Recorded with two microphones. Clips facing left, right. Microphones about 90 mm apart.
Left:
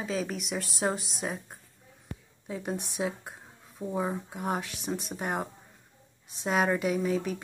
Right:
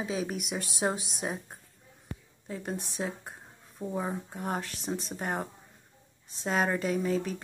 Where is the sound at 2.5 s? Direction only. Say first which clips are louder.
Left 2 dB; 10° left (ahead or behind).